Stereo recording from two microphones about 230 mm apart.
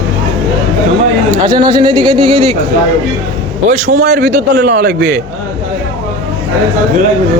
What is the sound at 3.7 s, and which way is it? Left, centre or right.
A man's voice, right.